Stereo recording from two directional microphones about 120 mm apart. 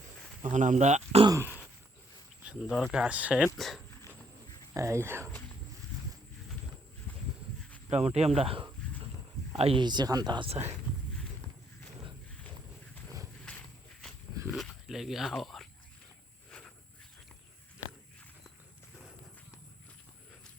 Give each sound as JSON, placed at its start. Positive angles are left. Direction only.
{"t": 0.4, "sound": "speech", "side_deg": -90}
{"t": 1.3, "sound": "speech", "side_deg": -20}
{"t": 2.4, "sound": "speech", "side_deg": -5}
{"t": 3.0, "sound": "speech", "side_deg": -10}
{"t": 3.6, "sound": "speech", "side_deg": 0}
{"t": 4.7, "sound": "speech", "side_deg": -25}
{"t": 7.1, "sound": "a sound", "side_deg": 10}
{"t": 7.9, "sound": "speech", "side_deg": -65}
{"t": 8.4, "sound": "speech", "side_deg": -50}
{"t": 9.8, "sound": "speech", "side_deg": -35}
{"t": 10.5, "sound": "speech", "side_deg": -65}
{"t": 14.5, "sound": "pig", "side_deg": 0}
{"t": 16.5, "sound": "walk", "side_deg": 10}